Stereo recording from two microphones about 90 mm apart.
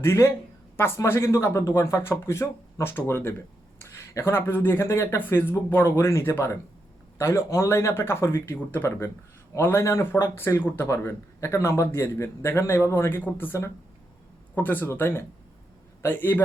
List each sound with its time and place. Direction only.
0.0 s a man's voice: 30° left (ahead or behind)